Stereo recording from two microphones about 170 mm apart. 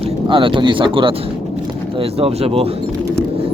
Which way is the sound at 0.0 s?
30° right (ahead or behind).